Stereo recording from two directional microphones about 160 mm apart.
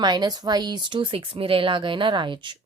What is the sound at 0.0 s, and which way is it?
A woman's voice, 25° right (ahead or behind).